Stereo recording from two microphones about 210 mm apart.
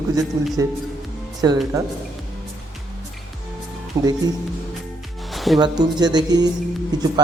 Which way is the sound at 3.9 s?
15° right (ahead or behind).